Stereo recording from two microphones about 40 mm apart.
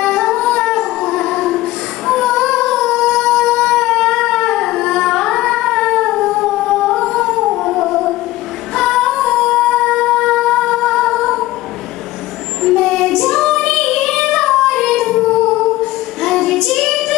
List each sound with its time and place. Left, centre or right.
0.0 s music: centre
2.0 s child singing: centre
3.5 s a sound: centre
8.7 s female singing: centre
12.6 s child singing: centre
15.3 s female singing: centre